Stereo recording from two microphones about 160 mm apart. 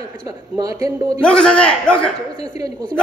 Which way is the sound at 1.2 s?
5° left (ahead or behind).